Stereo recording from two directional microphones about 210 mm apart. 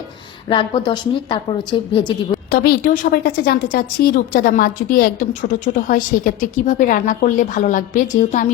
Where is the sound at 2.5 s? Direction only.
45° left (ahead or behind).